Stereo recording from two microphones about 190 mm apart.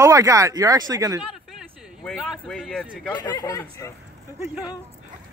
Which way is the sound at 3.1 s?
20° left (ahead or behind).